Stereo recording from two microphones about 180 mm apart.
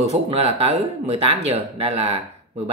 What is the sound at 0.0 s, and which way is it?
Speech, 35° right (ahead or behind).